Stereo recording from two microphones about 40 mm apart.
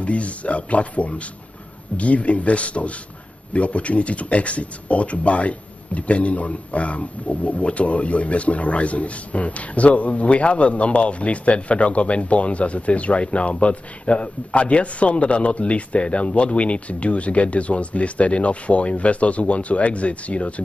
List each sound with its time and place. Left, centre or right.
0.0 s speech: left